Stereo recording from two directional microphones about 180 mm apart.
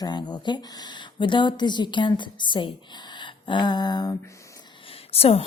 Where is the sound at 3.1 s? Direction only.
25° left (ahead or behind).